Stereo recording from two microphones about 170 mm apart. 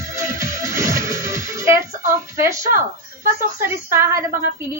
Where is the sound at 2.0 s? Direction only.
15° right (ahead or behind).